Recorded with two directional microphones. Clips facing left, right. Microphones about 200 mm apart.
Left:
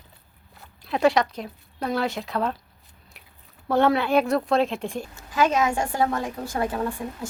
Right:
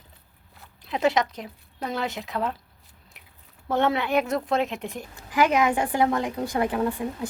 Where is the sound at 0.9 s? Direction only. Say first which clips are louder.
Left 3 dB; 20° right (ahead or behind).